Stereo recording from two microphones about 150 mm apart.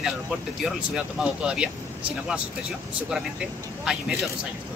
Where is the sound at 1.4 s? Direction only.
5° right (ahead or behind).